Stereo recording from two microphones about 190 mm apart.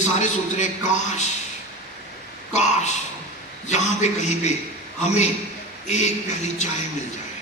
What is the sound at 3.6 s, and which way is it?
A man's voice, 35° left (ahead or behind).